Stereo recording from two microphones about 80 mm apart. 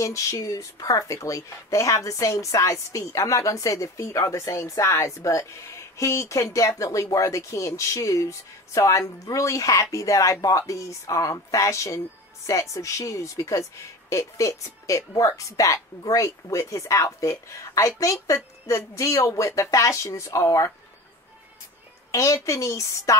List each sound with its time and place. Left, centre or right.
0.0 s speech: left
22.1 s speech: left